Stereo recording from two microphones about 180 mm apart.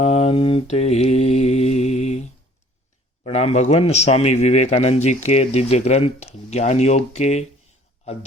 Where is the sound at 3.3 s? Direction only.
35° left (ahead or behind).